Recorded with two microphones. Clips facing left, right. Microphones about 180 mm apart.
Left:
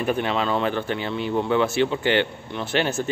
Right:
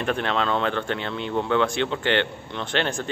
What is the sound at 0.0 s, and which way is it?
Speech, 5° left (ahead or behind).